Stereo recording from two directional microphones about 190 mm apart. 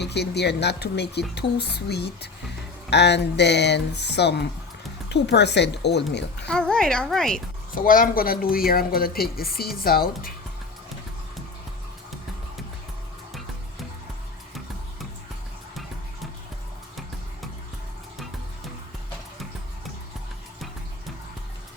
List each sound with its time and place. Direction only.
0.0 s speech: 60° left (ahead or behind)
6.5 s speech: 5° left (ahead or behind)
7.8 s speech: 50° left (ahead or behind)
15.7 s music: centre (ahead or behind)